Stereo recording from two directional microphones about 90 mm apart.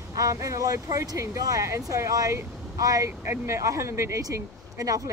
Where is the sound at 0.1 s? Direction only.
40° right (ahead or behind).